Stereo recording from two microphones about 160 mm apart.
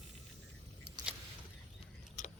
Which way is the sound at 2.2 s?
50° left (ahead or behind).